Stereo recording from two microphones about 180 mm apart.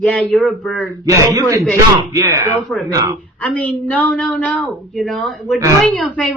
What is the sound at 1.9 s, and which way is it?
Speech, 20° right (ahead or behind).